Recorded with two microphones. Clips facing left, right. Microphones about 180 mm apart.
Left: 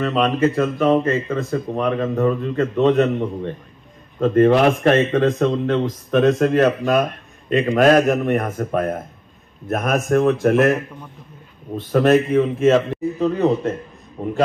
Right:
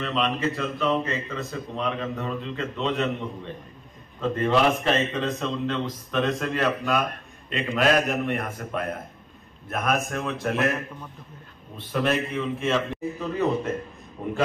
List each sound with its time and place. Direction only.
0.0 s speech: 50° left (ahead or behind)
11.7 s speech: 45° left (ahead or behind)